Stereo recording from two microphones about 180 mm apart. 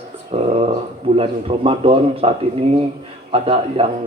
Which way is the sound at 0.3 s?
35° right (ahead or behind).